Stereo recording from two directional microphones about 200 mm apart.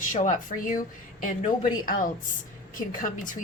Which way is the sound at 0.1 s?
40° left (ahead or behind).